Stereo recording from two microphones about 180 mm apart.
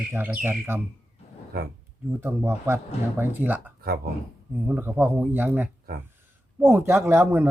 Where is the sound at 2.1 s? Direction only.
15° right (ahead or behind).